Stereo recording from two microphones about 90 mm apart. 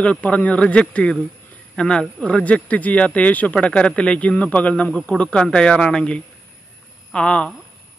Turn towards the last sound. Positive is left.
turn(degrees=10)  # may be behind; listen again after turning